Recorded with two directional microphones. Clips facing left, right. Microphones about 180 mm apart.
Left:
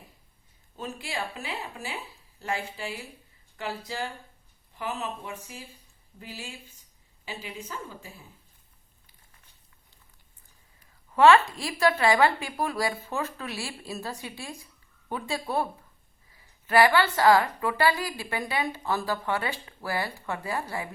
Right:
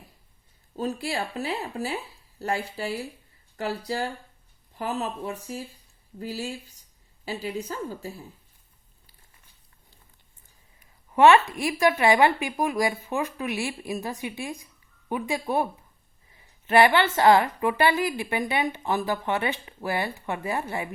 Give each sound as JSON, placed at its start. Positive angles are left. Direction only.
{"t": 0.8, "sound": "a woman's voice", "side_deg": -35}
{"t": 10.8, "sound": "a woman's voice", "side_deg": -20}